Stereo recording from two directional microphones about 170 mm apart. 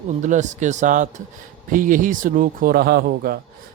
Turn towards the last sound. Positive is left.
turn(degrees=-60)  # may be behind; listen again after turning